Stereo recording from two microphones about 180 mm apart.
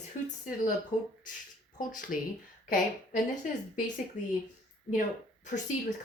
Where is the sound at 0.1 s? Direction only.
45° left (ahead or behind).